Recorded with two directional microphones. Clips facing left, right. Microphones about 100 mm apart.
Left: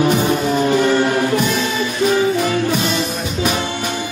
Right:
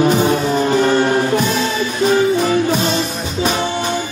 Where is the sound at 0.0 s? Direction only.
35° right (ahead or behind).